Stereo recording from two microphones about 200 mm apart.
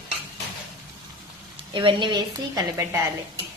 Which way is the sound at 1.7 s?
25° right (ahead or behind).